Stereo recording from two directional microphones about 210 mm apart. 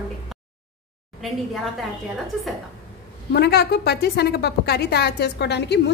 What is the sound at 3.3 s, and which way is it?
A woman's voice, 50° left (ahead or behind).